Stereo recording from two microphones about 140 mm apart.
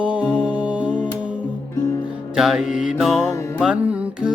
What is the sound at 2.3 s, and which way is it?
Music, 5° right (ahead or behind).